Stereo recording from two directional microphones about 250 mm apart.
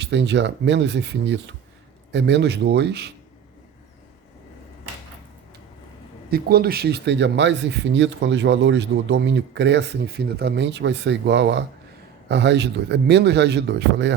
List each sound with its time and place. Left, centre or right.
0.0 s speech: right
6.3 s speech: right